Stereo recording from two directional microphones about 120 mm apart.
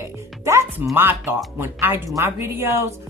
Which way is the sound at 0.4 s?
20° right (ahead or behind).